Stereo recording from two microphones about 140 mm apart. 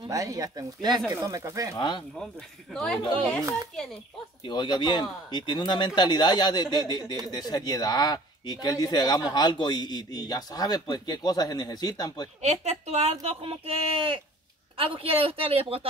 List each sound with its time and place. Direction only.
0.1 s speech: 25° right (ahead or behind)
1.8 s speech: 35° left (ahead or behind)
2.7 s speech: 5° left (ahead or behind)
4.4 s speech: 30° left (ahead or behind)
12.4 s speech: 55° right (ahead or behind)